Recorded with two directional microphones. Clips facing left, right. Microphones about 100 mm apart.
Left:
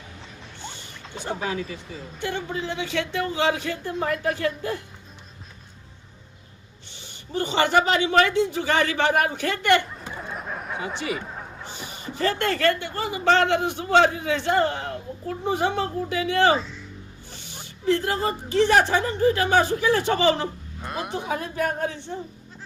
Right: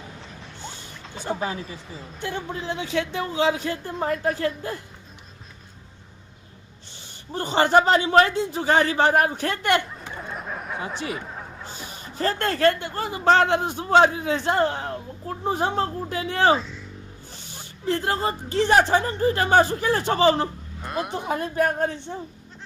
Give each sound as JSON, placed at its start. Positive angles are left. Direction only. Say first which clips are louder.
{"t": 1.1, "sound": "speech", "louder": "right 1 dB", "side_deg": 0}
{"t": 2.2, "sound": "a woman's voice", "louder": "left 1 dB", "side_deg": 65}
{"t": 3.6, "sound": "speech", "louder": "even", "side_deg": -45}
{"t": 7.3, "sound": "a woman's voice", "louder": "right 2 dB", "side_deg": -45}
{"t": 10.0, "sound": "a sound", "louder": "even", "side_deg": 0}
{"t": 12.1, "sound": "a woman's voice", "louder": "left 1 dB", "side_deg": -40}
{"t": 16.6, "sound": "speech", "louder": "left 1 dB", "side_deg": 0}
{"t": 17.8, "sound": "speech", "louder": "left 1 dB", "side_deg": -45}
{"t": 20.8, "sound": "speech", "louder": "right 2 dB", "side_deg": 0}
{"t": 21.2, "sound": "speech", "louder": "right 3 dB", "side_deg": -45}